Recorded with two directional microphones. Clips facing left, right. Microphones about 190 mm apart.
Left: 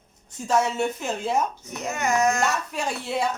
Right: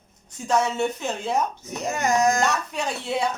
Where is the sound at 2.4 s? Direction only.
5° left (ahead or behind).